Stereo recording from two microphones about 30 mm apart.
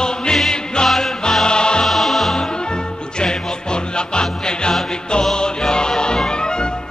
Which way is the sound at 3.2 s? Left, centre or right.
Left.